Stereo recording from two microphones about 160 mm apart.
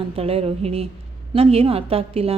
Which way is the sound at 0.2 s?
40° right (ahead or behind).